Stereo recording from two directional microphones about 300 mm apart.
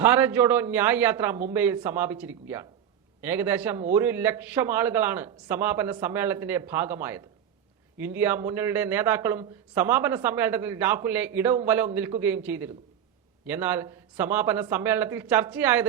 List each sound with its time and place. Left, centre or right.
0.0 s speech: centre